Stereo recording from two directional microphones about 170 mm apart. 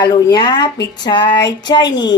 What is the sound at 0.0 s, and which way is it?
Speech, 25° left (ahead or behind).